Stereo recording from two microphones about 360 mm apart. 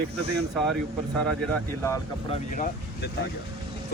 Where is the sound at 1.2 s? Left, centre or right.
Centre.